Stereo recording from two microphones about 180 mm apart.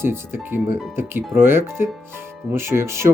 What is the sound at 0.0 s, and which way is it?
Speech, 15° right (ahead or behind).